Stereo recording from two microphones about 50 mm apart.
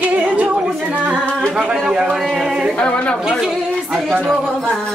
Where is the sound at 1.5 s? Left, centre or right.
Centre.